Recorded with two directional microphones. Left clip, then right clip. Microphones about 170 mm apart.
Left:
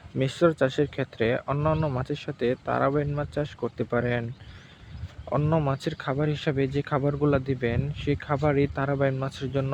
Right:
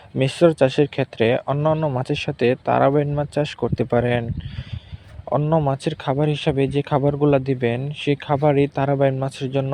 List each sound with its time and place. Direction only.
0.2 s speech: 30° right (ahead or behind)
5.3 s speech: 20° right (ahead or behind)